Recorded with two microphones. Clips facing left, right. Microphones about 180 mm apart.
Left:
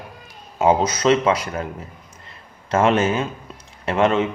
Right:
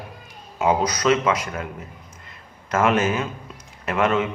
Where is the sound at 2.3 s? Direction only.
30° left (ahead or behind).